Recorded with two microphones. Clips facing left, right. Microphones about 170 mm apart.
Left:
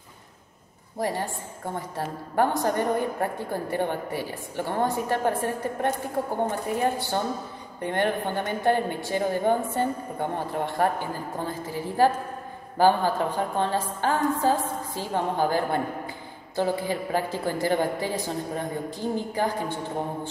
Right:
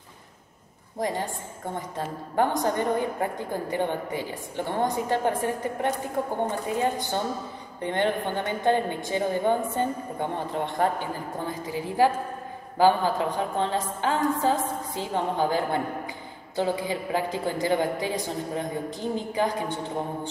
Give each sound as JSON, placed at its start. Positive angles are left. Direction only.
{"t": 0.9, "sound": "a woman's voice", "side_deg": -15}